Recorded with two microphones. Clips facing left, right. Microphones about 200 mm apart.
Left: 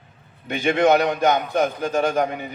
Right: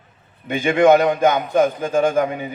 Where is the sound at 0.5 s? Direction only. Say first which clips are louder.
Right 4 dB; 50° right (ahead or behind).